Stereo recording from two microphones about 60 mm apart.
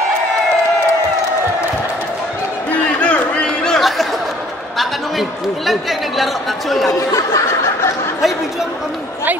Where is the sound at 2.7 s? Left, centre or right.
Left.